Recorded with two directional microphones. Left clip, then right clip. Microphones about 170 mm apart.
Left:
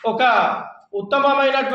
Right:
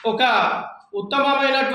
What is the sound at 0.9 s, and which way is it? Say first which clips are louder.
Speech: left 2 dB; centre (ahead or behind).